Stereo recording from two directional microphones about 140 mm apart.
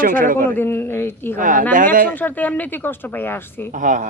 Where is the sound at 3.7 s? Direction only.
65° right (ahead or behind).